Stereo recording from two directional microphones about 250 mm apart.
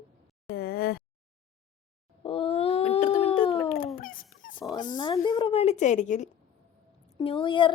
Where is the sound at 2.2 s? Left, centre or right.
Left.